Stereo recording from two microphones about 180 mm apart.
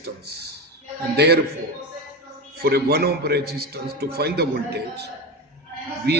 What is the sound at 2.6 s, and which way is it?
A man's voice, 60° right (ahead or behind).